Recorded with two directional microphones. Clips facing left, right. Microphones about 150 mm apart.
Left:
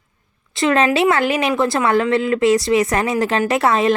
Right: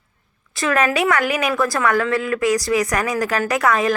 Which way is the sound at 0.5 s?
25° left (ahead or behind).